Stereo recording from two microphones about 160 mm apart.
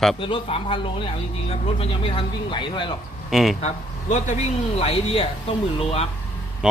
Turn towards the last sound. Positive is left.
turn(degrees=35)  # may be behind; listen again after turning